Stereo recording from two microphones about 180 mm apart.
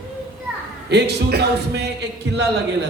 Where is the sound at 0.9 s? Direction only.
70° right (ahead or behind).